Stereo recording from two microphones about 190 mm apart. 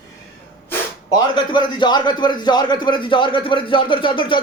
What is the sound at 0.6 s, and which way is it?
Speech, 20° left (ahead or behind).